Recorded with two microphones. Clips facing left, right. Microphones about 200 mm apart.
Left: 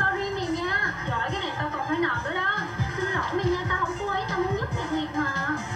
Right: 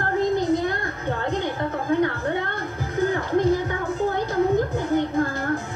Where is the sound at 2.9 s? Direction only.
45° right (ahead or behind).